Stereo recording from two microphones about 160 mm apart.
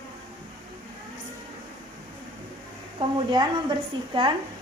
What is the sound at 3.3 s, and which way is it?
A woman's voice, 30° right (ahead or behind).